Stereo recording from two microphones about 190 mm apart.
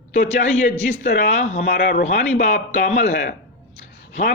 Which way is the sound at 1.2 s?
40° left (ahead or behind).